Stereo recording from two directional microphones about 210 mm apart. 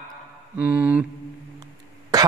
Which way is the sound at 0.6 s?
5° right (ahead or behind).